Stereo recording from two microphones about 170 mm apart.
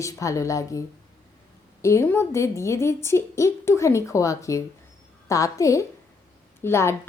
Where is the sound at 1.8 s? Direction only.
15° left (ahead or behind).